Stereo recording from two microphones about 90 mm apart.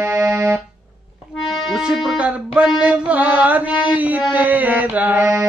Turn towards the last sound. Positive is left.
turn(degrees=-15)  # may be behind; listen again after turning